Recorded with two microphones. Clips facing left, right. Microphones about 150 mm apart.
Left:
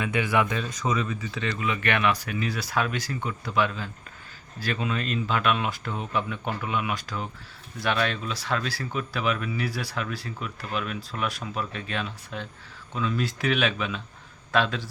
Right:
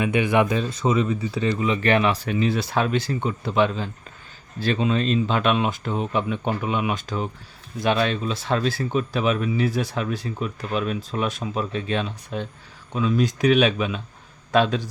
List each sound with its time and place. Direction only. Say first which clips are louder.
0.0 s speech: right 5 dB; 20° right (ahead or behind)
0.4 s speech: right 6 dB; 30° right (ahead or behind)